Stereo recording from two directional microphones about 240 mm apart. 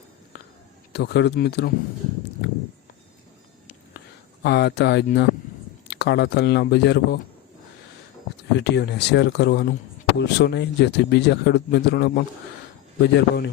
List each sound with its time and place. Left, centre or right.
0.9 s speech: left
4.4 s speech: left
8.5 s speech: left